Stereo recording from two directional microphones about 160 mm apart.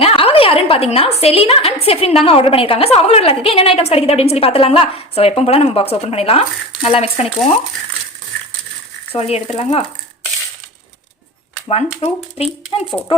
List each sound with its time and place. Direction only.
0.0 s a sound: 35° left (ahead or behind)
1.2 s a woman's voice: 40° left (ahead or behind)
9.1 s a woman's voice: 40° left (ahead or behind)
11.7 s a woman's voice: 40° left (ahead or behind)